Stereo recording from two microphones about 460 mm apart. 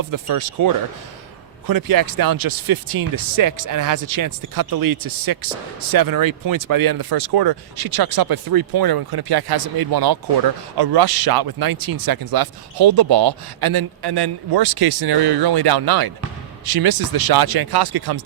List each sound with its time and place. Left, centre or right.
0.0 s speech: right